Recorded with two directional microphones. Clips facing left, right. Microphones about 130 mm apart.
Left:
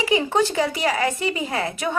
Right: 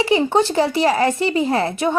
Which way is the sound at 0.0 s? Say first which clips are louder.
Right 4 dB; 30° right (ahead or behind).